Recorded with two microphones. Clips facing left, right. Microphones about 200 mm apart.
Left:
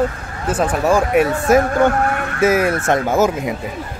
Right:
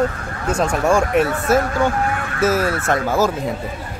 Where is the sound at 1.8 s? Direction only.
55° left (ahead or behind).